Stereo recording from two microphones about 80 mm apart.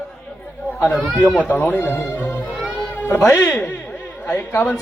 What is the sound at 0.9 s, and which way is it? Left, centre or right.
Speech, centre.